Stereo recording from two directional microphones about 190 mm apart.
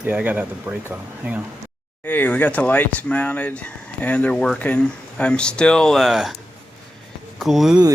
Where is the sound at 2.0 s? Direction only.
10° left (ahead or behind).